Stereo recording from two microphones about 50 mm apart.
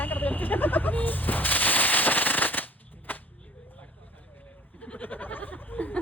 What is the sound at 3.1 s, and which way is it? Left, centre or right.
Whip, left.